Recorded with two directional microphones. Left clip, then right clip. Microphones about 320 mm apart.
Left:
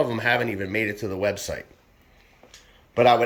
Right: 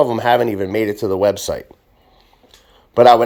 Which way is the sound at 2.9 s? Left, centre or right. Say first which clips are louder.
Right 9 dB; right.